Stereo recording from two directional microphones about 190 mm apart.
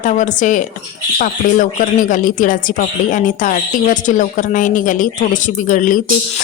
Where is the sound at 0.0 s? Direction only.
40° left (ahead or behind).